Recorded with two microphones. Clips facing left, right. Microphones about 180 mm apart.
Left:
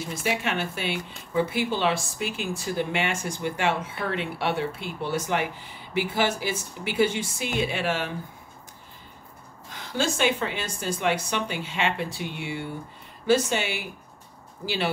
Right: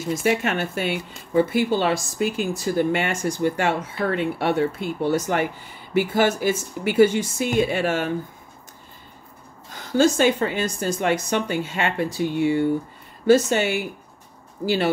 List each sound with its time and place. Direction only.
0.1 s speech: 45° right (ahead or behind)
9.7 s speech: 40° right (ahead or behind)